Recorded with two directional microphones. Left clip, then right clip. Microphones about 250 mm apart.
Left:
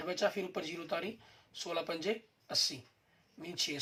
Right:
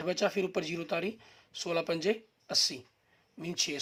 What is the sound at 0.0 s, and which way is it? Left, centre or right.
Speech, right.